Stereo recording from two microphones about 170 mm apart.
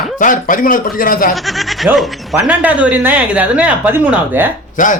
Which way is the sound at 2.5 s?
10° right (ahead or behind).